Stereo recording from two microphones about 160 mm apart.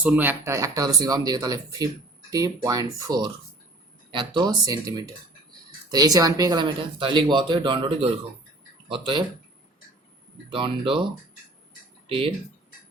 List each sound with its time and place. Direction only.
0.0 s speech: 10° right (ahead or behind); by 9.2 s 30° right (ahead or behind)
10.5 s speech: 30° right (ahead or behind)
12.0 s speech: 35° right (ahead or behind)